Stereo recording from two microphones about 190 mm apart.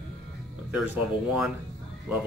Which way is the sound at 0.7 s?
5° right (ahead or behind).